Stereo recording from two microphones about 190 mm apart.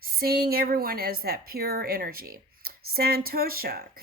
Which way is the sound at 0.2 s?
55° right (ahead or behind).